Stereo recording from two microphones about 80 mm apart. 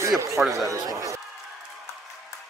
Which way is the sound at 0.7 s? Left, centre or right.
Right.